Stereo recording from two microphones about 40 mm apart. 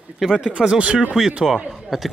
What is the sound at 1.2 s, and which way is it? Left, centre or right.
Speech, right.